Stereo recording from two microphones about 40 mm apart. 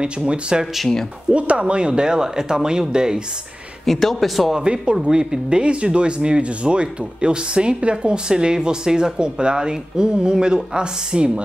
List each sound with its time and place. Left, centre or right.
0.0 s speech: right
3.8 s speech: centre
4.5 s speech: right